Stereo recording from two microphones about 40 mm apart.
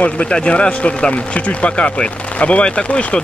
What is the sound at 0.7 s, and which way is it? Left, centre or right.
Speech, left.